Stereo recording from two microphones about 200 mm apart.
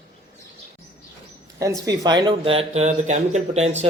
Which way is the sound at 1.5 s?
15° right (ahead or behind).